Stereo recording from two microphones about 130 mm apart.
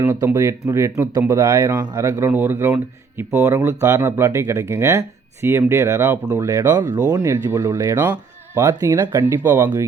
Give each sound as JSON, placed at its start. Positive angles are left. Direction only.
{"t": 0.0, "sound": "speech", "side_deg": -20}
{"t": 8.6, "sound": "speech", "side_deg": -25}